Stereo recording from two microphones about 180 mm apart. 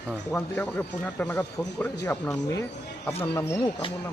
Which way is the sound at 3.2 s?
15° left (ahead or behind).